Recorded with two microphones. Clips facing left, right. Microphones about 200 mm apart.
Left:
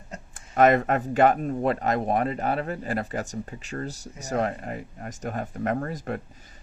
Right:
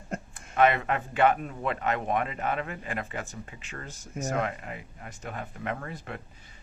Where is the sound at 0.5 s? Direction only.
40° left (ahead or behind).